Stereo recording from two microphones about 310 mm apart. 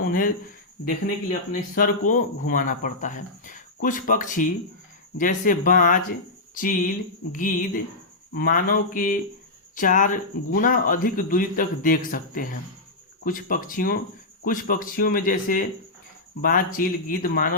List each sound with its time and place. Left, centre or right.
0.1 s speech: left